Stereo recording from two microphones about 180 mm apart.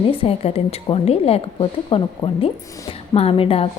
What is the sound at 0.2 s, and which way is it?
Speech, 30° left (ahead or behind).